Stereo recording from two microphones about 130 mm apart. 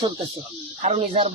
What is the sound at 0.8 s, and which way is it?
Speech, 60° right (ahead or behind).